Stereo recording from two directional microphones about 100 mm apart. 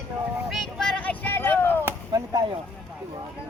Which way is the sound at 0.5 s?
5° left (ahead or behind).